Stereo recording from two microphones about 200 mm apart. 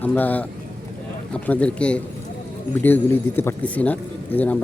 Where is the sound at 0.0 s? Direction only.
10° left (ahead or behind).